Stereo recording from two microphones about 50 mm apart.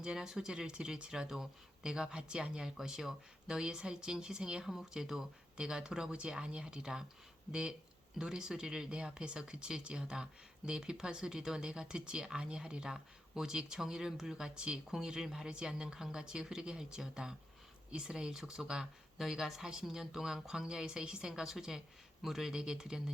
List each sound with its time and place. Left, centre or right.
0.0 s speech: centre